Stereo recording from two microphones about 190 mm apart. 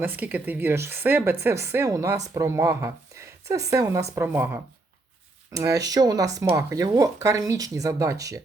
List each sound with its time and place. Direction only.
0.0 s speech: 10° right (ahead or behind)